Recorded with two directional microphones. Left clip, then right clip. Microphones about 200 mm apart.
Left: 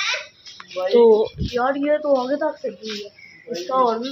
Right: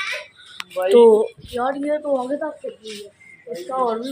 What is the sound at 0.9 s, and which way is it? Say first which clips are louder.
Speech: right 2 dB; 10° right (ahead or behind).